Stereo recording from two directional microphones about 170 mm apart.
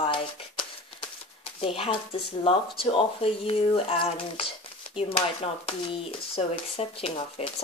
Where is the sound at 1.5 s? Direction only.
35° left (ahead or behind).